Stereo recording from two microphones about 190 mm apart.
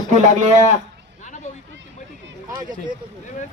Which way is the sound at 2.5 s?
20° right (ahead or behind).